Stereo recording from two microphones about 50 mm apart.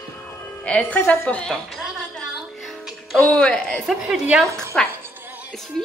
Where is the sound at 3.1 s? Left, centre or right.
Left.